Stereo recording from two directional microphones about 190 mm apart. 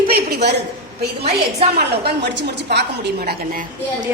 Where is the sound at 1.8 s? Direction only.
60° right (ahead or behind).